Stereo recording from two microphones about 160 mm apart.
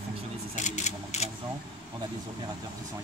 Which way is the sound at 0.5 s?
45° left (ahead or behind).